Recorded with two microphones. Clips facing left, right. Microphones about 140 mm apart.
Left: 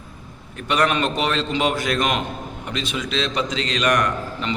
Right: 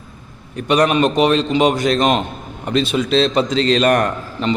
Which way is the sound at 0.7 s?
20° right (ahead or behind).